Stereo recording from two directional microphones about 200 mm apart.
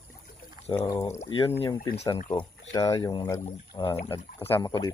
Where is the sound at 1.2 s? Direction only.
25° left (ahead or behind).